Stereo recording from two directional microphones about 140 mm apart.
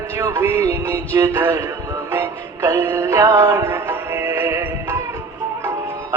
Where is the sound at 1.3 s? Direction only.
25° right (ahead or behind).